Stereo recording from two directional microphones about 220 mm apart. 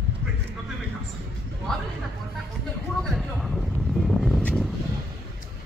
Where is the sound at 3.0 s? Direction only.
Centre (ahead or behind).